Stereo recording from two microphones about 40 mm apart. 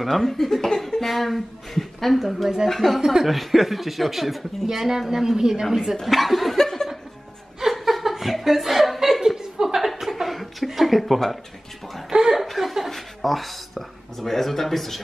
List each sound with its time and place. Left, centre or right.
0.0 s speech: centre
3.0 s a woman's voice: centre
3.3 s a woman's voice: centre
6.0 s speech: centre
6.6 s laughter: centre
7.6 s chuckle: centre
12.1 s chuckle: centre
12.4 s chuckle: centre